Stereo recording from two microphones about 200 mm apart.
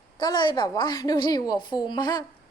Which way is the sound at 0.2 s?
20° left (ahead or behind).